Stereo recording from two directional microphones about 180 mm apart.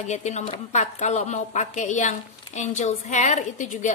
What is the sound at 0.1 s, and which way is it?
A woman's voice, 40° left (ahead or behind).